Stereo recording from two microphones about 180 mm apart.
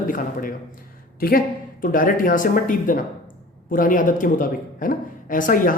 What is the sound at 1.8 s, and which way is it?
A man's voice, 50° left (ahead or behind).